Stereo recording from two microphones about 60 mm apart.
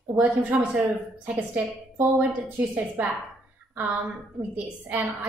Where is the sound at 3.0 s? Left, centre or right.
Right.